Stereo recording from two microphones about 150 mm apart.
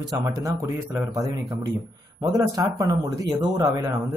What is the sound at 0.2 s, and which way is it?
Speech, 15° right (ahead or behind).